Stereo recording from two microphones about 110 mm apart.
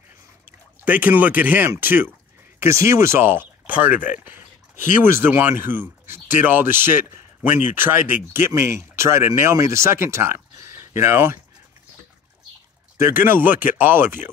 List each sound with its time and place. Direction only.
0.5 s speech: 15° right (ahead or behind)
12.9 s speech: 20° right (ahead or behind)